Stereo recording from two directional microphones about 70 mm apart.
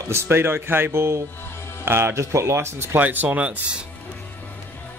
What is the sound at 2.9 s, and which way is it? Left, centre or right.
Speech, right.